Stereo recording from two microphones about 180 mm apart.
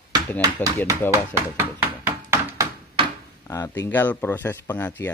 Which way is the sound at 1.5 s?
10° right (ahead or behind).